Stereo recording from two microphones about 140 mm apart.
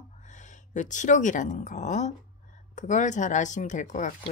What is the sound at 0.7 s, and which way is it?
Speech, 60° left (ahead or behind).